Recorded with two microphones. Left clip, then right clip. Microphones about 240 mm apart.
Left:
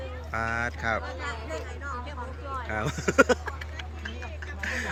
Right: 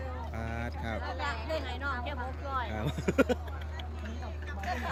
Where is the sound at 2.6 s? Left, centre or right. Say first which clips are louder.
Left 6 dB; centre.